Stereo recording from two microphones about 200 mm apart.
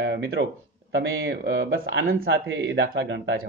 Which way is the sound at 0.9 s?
65° right (ahead or behind).